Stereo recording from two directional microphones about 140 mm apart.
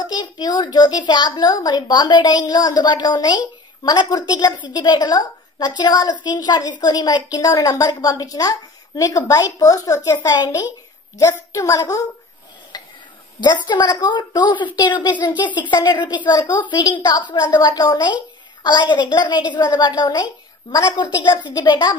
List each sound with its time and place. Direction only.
0.0 s a child's voice: 30° left (ahead or behind)
12.7 s a sound: 30° left (ahead or behind)
13.4 s a woman's voice: 30° left (ahead or behind)